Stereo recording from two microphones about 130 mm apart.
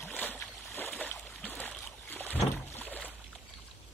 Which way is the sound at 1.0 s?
15° left (ahead or behind).